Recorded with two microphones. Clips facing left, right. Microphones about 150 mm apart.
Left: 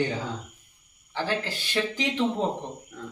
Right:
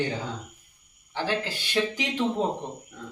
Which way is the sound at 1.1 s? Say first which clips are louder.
Even; 15° right (ahead or behind).